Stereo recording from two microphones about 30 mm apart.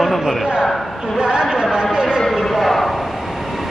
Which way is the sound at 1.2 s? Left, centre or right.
Right.